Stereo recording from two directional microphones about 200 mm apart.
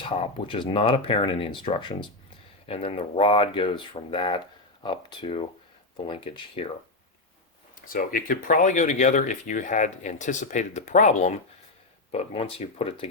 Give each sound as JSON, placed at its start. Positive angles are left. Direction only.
{"t": 0.0, "sound": "speech", "side_deg": 25}
{"t": 7.8, "sound": "speech", "side_deg": 45}